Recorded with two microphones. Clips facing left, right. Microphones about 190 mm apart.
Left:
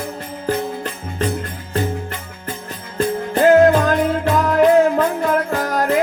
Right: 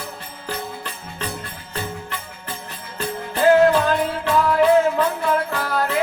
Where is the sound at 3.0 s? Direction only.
45° left (ahead or behind).